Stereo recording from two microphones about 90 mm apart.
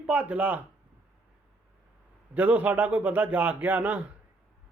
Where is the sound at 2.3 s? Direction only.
20° right (ahead or behind).